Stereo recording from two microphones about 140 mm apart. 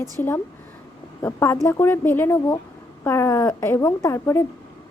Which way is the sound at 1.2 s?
20° left (ahead or behind).